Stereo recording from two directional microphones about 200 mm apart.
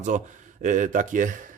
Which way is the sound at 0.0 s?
40° right (ahead or behind).